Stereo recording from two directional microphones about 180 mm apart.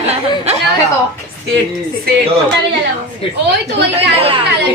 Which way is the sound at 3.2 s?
30° left (ahead or behind).